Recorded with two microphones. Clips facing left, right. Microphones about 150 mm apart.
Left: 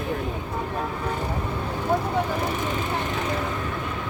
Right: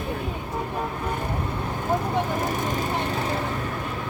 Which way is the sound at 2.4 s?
45° right (ahead or behind).